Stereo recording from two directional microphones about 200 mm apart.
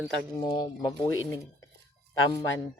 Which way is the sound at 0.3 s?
20° left (ahead or behind).